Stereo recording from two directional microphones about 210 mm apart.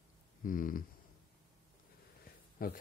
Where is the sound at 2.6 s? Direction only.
45° left (ahead or behind).